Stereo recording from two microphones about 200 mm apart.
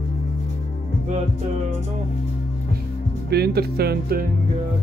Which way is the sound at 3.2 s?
55° right (ahead or behind).